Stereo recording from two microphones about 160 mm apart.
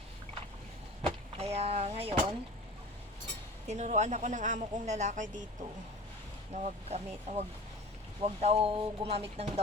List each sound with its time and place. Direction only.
1.0 s vehicle: 40° right (ahead or behind)
3.7 s speech: 45° right (ahead or behind)
6.5 s speech: 45° right (ahead or behind)